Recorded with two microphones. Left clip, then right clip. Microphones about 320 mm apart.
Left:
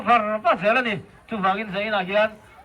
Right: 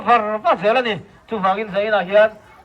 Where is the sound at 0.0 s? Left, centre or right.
Right.